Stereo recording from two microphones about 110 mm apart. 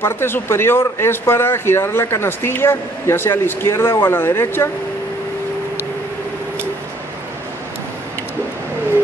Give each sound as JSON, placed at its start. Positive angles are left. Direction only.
{"t": 0.0, "sound": "speech", "side_deg": 20}